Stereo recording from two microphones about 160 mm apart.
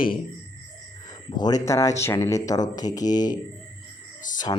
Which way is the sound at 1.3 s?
25° left (ahead or behind).